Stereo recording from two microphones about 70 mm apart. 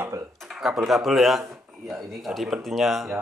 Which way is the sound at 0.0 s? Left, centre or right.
Right.